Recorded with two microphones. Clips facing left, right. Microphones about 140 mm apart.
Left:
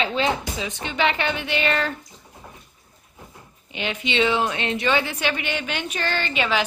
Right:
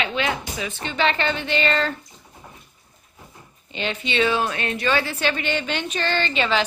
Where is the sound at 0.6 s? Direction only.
15° left (ahead or behind).